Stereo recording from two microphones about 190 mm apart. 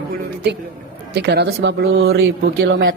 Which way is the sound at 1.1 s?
60° right (ahead or behind).